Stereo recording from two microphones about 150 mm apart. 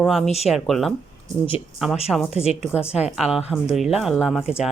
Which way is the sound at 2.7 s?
5° right (ahead or behind).